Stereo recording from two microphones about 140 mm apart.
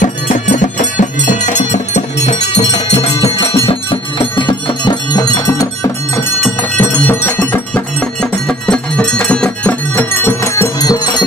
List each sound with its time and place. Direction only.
0.0 s music: 65° left (ahead or behind); by 5.7 s 30° left (ahead or behind)
6.8 s music: 15° left (ahead or behind)
7.5 s cowbell: 10° left (ahead or behind); by 11.2 s 25° left (ahead or behind)